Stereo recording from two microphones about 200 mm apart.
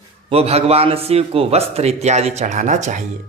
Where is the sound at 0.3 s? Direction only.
30° right (ahead or behind).